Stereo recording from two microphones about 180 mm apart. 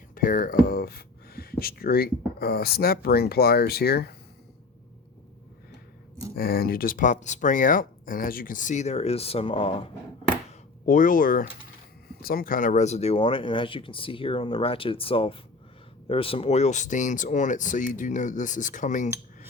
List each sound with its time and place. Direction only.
0.1 s speech: 50° left (ahead or behind)
6.3 s speech: 55° left (ahead or behind); by 9.9 s 30° left (ahead or behind)
10.8 s speech: 45° left (ahead or behind)